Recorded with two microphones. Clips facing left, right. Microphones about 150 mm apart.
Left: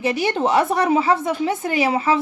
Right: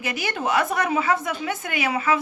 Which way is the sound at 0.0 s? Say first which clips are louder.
Left 7 dB; 30° left (ahead or behind).